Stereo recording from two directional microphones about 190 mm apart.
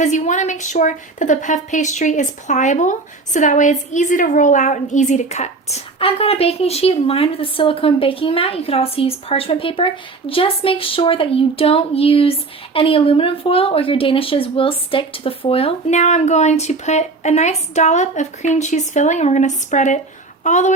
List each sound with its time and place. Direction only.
0.0 s a woman's voice: 40° left (ahead or behind)